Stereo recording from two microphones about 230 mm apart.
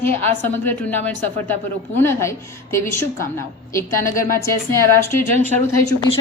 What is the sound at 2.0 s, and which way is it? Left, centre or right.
A woman's voice, centre.